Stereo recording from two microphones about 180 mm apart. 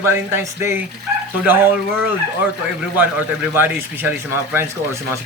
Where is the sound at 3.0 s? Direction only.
10° right (ahead or behind).